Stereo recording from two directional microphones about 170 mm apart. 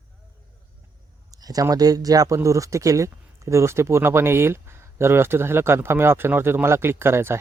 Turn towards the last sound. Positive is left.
turn(degrees=-15)  # may be behind; listen again after turning